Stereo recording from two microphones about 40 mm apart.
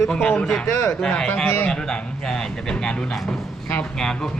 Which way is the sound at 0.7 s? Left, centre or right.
Left.